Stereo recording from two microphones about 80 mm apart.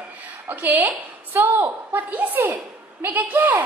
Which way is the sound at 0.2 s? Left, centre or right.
Right.